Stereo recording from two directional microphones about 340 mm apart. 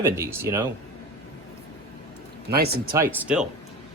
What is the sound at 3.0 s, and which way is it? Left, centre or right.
Speech, centre.